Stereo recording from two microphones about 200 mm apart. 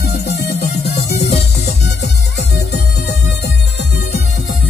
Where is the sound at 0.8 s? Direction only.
55° left (ahead or behind).